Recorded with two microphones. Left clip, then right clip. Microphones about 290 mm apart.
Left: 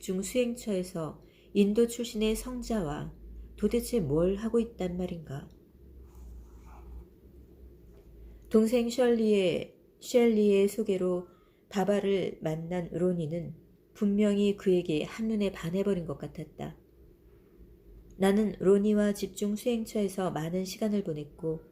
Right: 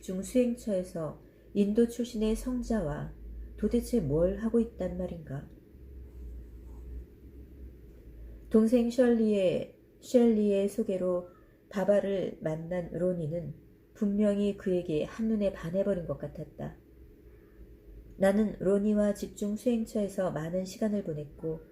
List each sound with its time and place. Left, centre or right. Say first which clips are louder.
0.0 s speech: right 1 dB; left
8.4 s speech: even; left
18.2 s speech: right 1 dB; left